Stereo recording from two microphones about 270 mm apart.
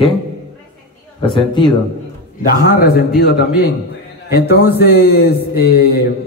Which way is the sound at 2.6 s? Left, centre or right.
Left.